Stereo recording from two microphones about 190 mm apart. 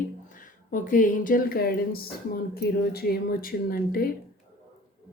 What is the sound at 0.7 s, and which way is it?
Speech, 45° left (ahead or behind).